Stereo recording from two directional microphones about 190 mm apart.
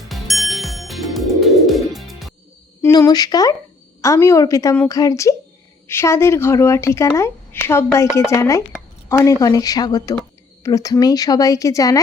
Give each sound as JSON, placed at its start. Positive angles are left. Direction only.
{"t": 0.0, "sound": "music", "side_deg": 0}
{"t": 2.8, "sound": "a woman's voice", "side_deg": 15}